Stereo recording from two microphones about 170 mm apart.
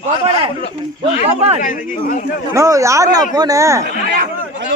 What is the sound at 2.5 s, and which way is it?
Speech, 20° right (ahead or behind).